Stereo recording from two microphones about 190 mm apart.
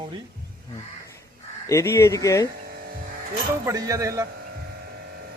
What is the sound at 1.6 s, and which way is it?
Speech, 15° left (ahead or behind).